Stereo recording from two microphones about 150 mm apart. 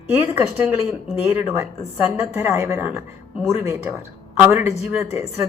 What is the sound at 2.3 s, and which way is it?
Speech, 15° right (ahead or behind).